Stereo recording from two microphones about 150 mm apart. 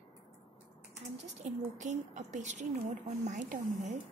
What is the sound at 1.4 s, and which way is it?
A woman's voice, 55° right (ahead or behind).